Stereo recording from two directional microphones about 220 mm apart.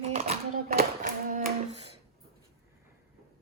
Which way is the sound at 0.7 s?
40° right (ahead or behind).